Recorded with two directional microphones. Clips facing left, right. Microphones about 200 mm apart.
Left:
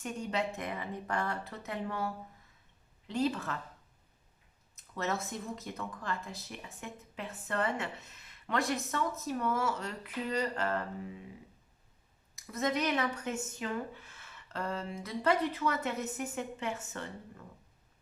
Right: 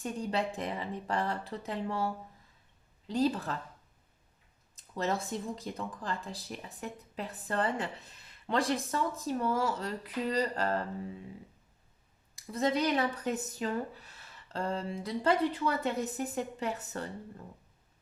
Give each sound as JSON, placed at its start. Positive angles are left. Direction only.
{"t": 0.0, "sound": "speech", "side_deg": -35}
{"t": 3.1, "sound": "speech", "side_deg": -35}
{"t": 4.7, "sound": "speech", "side_deg": -30}
{"t": 12.4, "sound": "speech", "side_deg": -30}